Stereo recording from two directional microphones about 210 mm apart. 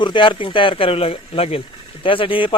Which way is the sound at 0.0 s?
25° left (ahead or behind).